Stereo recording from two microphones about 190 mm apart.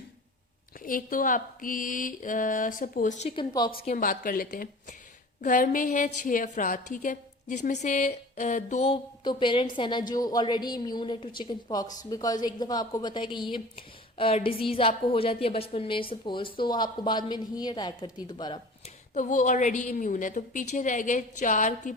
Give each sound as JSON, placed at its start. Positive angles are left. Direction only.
{"t": 0.8, "sound": "a woman's voice", "side_deg": 45}
{"t": 3.9, "sound": "a woman's voice", "side_deg": 45}
{"t": 19.1, "sound": "a woman's voice", "side_deg": 40}